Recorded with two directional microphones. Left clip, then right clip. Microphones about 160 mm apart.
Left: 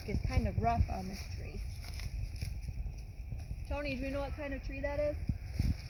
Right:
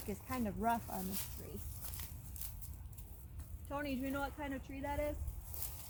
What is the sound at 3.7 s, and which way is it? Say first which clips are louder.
Speech: left 3 dB; 20° left (ahead or behind).